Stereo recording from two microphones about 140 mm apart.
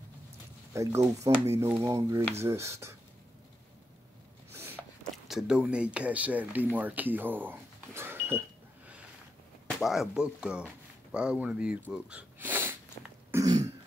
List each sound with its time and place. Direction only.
1.2 s speech: 20° right (ahead or behind)
4.5 s a sound: 15° right (ahead or behind)
5.0 s speech: centre (ahead or behind); by 8.4 s 15° right (ahead or behind)
9.8 s speech: centre (ahead or behind)
11.9 s a sound: 10° right (ahead or behind)
13.3 s throat clearing: 25° right (ahead or behind)